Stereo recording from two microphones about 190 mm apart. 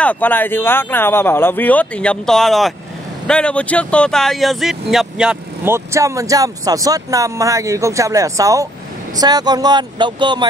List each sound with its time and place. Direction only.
0.0 s speech: 10° left (ahead or behind); by 10.4 s 25° right (ahead or behind)